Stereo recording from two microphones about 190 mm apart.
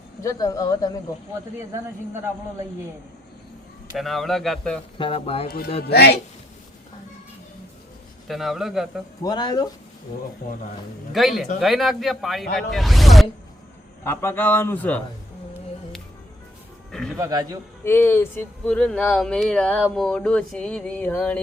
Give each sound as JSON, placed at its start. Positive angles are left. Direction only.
{"t": 0.2, "sound": "speech", "side_deg": 20}
{"t": 3.9, "sound": "a man's voice", "side_deg": 0}
{"t": 4.9, "sound": "speech", "side_deg": 30}
{"t": 5.9, "sound": "speech", "side_deg": 55}
{"t": 8.3, "sound": "a man's voice", "side_deg": 0}
{"t": 9.2, "sound": "speech", "side_deg": 20}
{"t": 10.4, "sound": "speech", "side_deg": 50}
{"t": 11.1, "sound": "a man's voice", "side_deg": 0}
{"t": 14.0, "sound": "speech", "side_deg": 10}
{"t": 16.9, "sound": "music", "side_deg": 5}
{"t": 17.2, "sound": "a man's voice", "side_deg": -20}
{"t": 17.8, "sound": "speech", "side_deg": 10}